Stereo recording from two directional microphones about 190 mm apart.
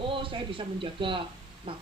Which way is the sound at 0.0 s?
25° right (ahead or behind).